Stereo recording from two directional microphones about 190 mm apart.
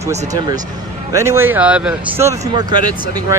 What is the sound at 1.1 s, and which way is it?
Speech, 15° right (ahead or behind).